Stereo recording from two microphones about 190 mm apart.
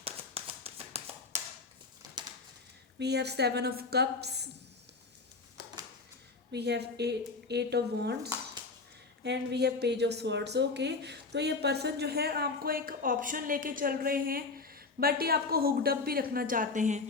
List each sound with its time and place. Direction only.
0.0 s tap: 30° right (ahead or behind)
3.0 s speech: 60° right (ahead or behind)
6.5 s speech: 60° right (ahead or behind); by 17.0 s 40° right (ahead or behind)